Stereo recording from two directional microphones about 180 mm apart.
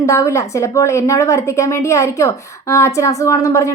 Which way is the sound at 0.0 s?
15° left (ahead or behind).